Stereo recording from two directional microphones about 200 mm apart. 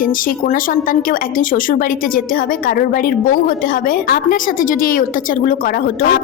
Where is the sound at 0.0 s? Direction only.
45° left (ahead or behind).